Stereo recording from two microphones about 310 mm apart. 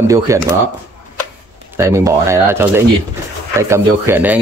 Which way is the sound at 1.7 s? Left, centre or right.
Centre.